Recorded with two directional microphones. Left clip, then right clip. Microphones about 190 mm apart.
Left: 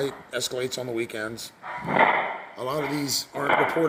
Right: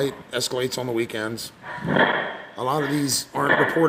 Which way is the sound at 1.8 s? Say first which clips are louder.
Even; 35° right (ahead or behind).